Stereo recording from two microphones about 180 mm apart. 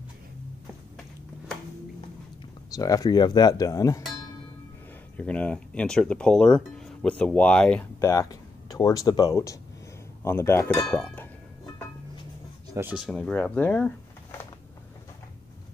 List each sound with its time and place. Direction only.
2.7 s speech: 20° left (ahead or behind)
5.1 s speech: 5° left (ahead or behind)
8.0 s speech: 20° left (ahead or behind)
12.6 s a sound: 15° right (ahead or behind)
12.9 s speech: 5° left (ahead or behind)